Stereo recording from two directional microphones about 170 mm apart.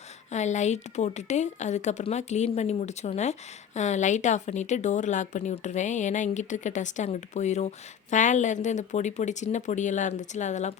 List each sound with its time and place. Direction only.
0.3 s speech: 45° left (ahead or behind)